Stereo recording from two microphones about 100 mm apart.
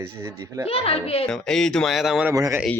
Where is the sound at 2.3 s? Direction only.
35° right (ahead or behind).